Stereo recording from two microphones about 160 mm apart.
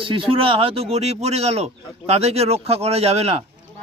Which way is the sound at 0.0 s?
35° right (ahead or behind).